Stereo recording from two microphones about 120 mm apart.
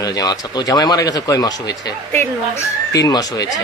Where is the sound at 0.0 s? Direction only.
35° left (ahead or behind).